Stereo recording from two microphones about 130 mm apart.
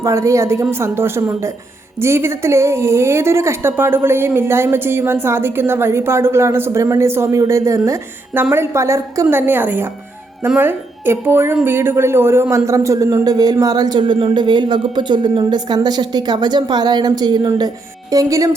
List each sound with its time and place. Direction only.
0.0 s a woman's voice: 20° right (ahead or behind)